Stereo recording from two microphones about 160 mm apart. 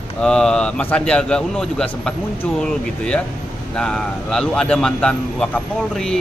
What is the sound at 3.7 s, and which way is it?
Speech, 5° left (ahead or behind).